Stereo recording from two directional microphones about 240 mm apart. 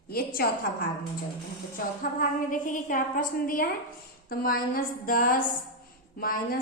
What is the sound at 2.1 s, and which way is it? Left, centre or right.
A woman's voice, left.